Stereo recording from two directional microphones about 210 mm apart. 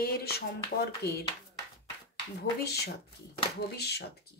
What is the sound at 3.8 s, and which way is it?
Speech, 50° left (ahead or behind).